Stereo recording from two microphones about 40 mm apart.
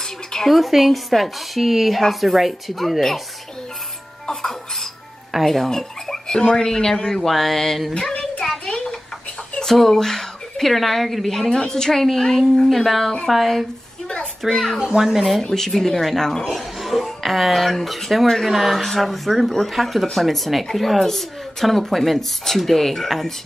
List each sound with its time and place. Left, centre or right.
0.5 s speech: centre
4.3 s speech: centre
7.9 s a sound: left
9.7 s a woman's voice: centre
12.6 s speech: centre
14.8 s speech: centre
15.4 s speech: centre
16.5 s speech: centre